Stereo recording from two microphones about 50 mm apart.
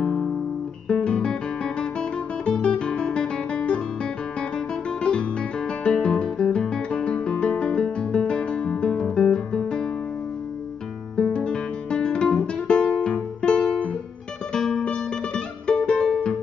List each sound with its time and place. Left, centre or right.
0.0 s music: centre
1.0 s guitar: centre
5.9 s music: centre
11.1 s music: centre